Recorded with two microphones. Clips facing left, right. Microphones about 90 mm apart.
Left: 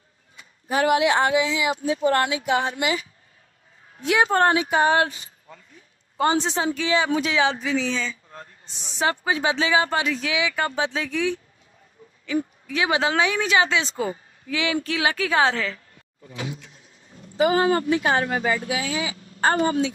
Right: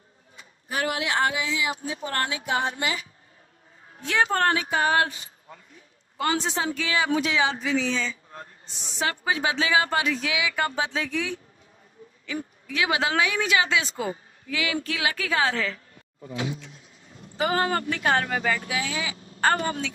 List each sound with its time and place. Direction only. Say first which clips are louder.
0.7 s speech: left 8 dB; 25° left (ahead or behind)
4.0 s speech: left 4 dB; 15° left (ahead or behind)
6.1 s speech: left 4 dB; 25° left (ahead or behind)
17.4 s speech: left 5 dB; 15° left (ahead or behind)